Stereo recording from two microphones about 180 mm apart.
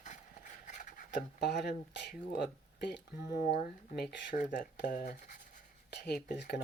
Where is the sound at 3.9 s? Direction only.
60° left (ahead or behind).